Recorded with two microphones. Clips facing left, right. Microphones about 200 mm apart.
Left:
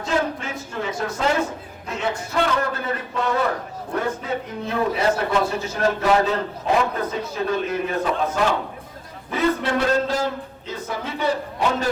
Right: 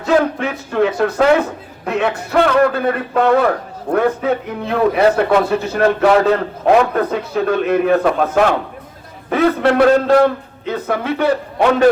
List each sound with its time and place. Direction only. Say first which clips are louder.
0.0 s a man's voice: right 8 dB; 65° right (ahead or behind)